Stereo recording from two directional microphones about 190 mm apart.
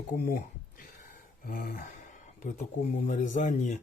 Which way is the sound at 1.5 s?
45° left (ahead or behind).